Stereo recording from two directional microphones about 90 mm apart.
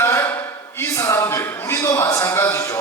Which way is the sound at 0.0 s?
30° left (ahead or behind).